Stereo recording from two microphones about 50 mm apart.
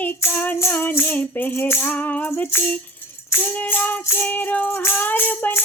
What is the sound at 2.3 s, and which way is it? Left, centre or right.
Music, left.